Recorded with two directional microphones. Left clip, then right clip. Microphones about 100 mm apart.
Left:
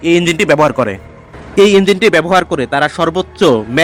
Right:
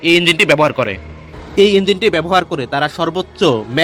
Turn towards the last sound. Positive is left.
turn(degrees=30)  # may be behind; listen again after turning